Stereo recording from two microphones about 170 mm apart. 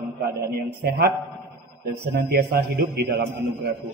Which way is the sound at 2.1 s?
65° right (ahead or behind).